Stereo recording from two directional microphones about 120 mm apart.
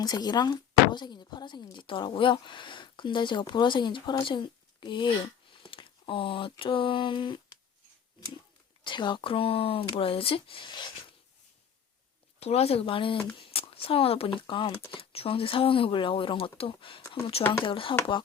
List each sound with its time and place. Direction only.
0.0 s speech: 35° left (ahead or behind)
8.8 s speech: 40° left (ahead or behind)
12.4 s speech: 60° left (ahead or behind); by 17.9 s 45° left (ahead or behind)